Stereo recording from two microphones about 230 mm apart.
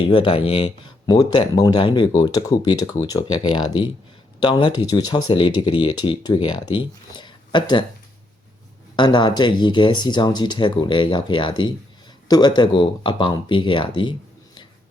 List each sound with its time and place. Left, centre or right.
0.0 s speech: left
9.0 s speech: centre